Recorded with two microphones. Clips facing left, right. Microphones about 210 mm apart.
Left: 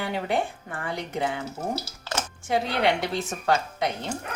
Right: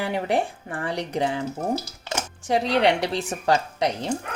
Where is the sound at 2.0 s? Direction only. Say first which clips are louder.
Right 1 dB; 15° right (ahead or behind).